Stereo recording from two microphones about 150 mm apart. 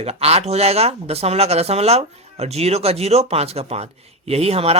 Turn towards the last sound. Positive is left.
turn(degrees=-40)  # may be behind; listen again after turning